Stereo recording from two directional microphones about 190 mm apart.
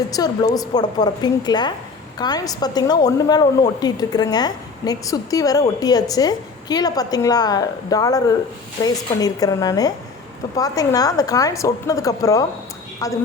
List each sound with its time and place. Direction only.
0.1 s a woman's voice: 20° left (ahead or behind)